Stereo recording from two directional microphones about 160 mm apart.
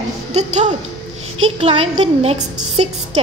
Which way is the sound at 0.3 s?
45° right (ahead or behind).